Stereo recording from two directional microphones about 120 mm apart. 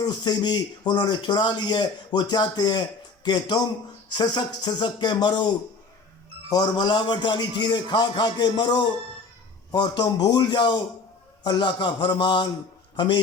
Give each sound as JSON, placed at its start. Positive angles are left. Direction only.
{"t": 0.0, "sound": "speech", "side_deg": 35}
{"t": 6.5, "sound": "speech", "side_deg": 35}